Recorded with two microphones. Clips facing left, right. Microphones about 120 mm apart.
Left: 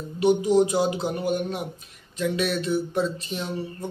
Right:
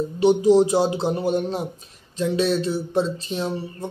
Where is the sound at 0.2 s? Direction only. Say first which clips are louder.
Right 3 dB; 30° right (ahead or behind).